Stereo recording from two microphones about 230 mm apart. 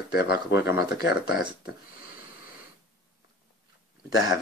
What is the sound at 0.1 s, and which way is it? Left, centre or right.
Speech, left.